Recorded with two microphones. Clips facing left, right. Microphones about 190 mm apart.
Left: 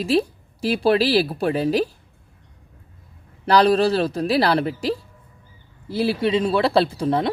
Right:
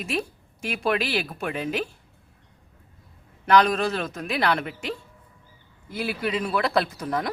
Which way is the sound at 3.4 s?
35° left (ahead or behind).